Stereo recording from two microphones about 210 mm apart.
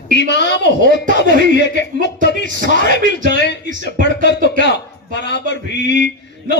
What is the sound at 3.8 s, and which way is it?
A man's voice, 55° left (ahead or behind).